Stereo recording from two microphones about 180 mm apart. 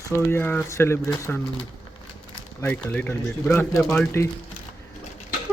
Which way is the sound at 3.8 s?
Centre (ahead or behind).